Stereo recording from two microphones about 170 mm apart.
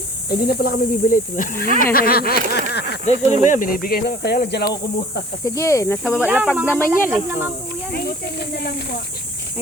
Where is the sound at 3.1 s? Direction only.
45° left (ahead or behind); by 5.2 s 75° left (ahead or behind).